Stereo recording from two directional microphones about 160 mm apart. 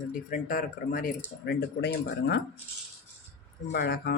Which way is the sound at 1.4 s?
85° left.